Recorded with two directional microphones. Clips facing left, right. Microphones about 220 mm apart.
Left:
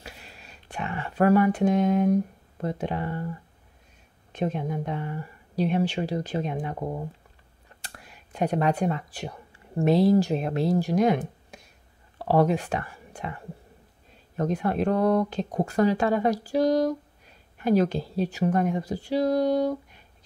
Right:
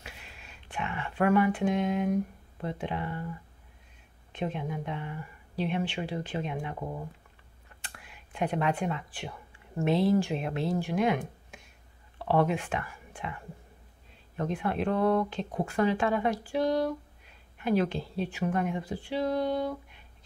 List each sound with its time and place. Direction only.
0.0 s speech: 35° left (ahead or behind)
4.3 s speech: 40° left (ahead or behind)